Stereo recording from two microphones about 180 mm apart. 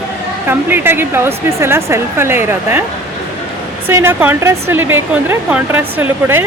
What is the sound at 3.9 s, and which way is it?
Speech, 15° right (ahead or behind).